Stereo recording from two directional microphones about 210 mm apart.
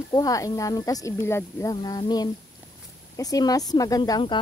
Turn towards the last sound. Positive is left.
turn(degrees=20)  # may be behind; listen again after turning